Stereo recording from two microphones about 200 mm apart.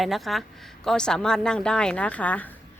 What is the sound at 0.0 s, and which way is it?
Speech, centre (ahead or behind).